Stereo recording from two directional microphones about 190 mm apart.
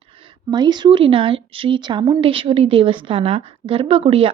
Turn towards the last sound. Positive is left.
turn(degrees=-30)  # may be behind; listen again after turning